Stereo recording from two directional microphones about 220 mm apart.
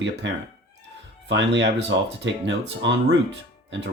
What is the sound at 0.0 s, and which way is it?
Speech, 55° right (ahead or behind).